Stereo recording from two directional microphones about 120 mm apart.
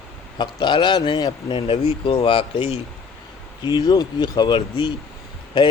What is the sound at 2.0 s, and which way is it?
Speech, 50° left (ahead or behind).